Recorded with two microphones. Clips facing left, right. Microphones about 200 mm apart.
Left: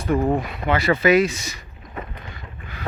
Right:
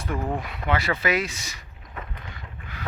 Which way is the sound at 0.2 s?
30° left (ahead or behind).